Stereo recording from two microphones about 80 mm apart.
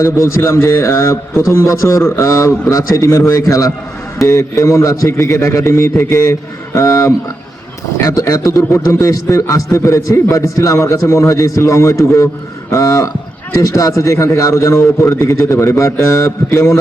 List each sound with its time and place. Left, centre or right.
0.0 s a man's voice: left